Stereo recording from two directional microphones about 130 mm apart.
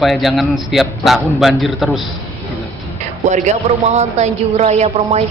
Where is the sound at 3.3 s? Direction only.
65° right (ahead or behind).